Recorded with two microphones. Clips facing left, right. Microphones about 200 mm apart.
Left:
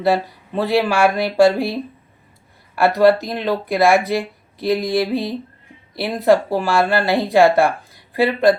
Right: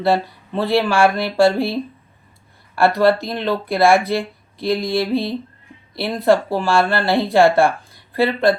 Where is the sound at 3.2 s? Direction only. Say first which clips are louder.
Even; 15° left (ahead or behind).